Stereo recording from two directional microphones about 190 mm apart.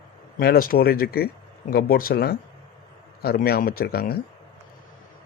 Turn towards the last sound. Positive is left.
turn(degrees=55)  # may be behind; listen again after turning